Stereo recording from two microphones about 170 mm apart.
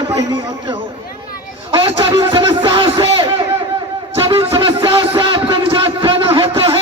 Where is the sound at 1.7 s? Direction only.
25° right (ahead or behind).